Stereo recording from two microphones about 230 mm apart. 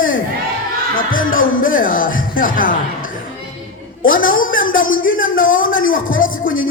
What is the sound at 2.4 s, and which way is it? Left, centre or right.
Music, left.